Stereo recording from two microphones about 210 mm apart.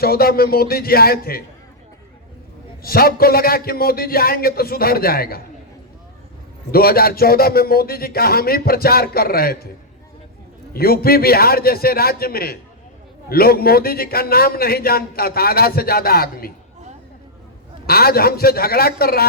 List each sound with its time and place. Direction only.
0.0 s a man's voice: 45° left (ahead or behind)
2.8 s a man's voice: 45° left (ahead or behind)
6.7 s a man's voice: 45° left (ahead or behind)
10.8 s a man's voice: 45° left (ahead or behind)
17.8 s a man's voice: 45° left (ahead or behind)